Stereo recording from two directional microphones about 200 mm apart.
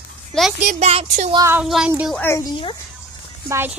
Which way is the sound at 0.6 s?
35° right (ahead or behind).